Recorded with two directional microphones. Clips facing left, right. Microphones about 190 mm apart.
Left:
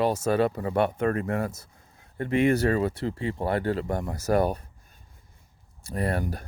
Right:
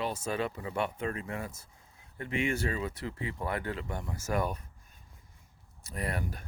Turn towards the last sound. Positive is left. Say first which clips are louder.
# left 8 dB
turn(degrees=35)  # may be behind; listen again after turning